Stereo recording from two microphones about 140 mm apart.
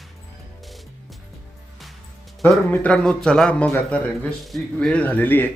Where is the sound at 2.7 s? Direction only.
5° left (ahead or behind).